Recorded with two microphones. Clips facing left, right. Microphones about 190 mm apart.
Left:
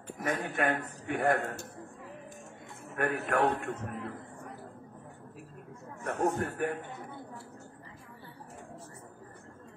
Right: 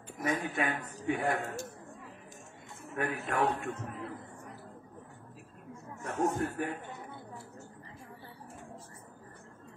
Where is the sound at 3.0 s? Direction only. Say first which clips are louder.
Left 3 dB; 60° left (ahead or behind).